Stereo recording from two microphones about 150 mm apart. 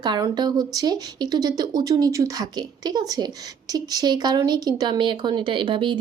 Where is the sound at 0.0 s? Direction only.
30° right (ahead or behind).